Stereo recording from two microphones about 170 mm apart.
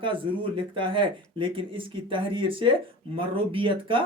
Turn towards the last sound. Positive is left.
turn(degrees=-30)  # may be behind; listen again after turning